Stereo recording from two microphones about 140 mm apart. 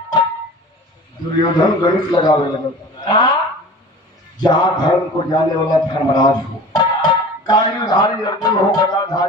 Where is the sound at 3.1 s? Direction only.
30° left (ahead or behind).